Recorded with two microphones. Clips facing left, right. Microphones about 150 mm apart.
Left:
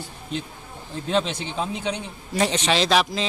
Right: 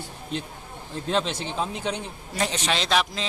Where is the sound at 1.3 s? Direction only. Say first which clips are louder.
Even; 35° right (ahead or behind).